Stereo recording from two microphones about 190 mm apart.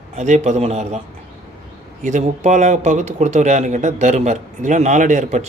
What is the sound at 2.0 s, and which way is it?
Speech, 40° right (ahead or behind).